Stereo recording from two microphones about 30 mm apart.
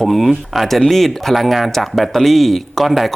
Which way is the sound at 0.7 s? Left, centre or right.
Centre.